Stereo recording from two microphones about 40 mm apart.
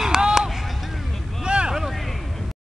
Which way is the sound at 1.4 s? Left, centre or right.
Right.